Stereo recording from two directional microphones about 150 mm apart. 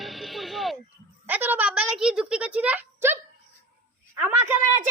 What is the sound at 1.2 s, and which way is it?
A woman's voice, 10° right (ahead or behind).